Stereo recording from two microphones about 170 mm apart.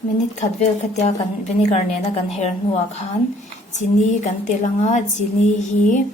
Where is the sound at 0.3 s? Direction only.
40° left (ahead or behind).